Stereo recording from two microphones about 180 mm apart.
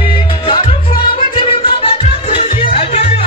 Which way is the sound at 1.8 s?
30° left (ahead or behind).